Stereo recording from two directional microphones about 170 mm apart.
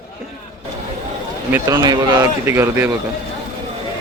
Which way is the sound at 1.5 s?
20° right (ahead or behind).